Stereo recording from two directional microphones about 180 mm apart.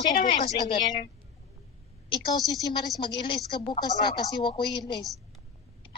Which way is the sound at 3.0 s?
25° left (ahead or behind).